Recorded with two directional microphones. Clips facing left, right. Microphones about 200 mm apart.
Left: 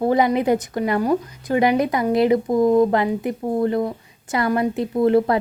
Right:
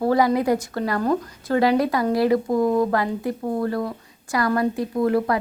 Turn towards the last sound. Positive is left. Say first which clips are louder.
# left 4 dB
turn(degrees=25)  # may be behind; listen again after turning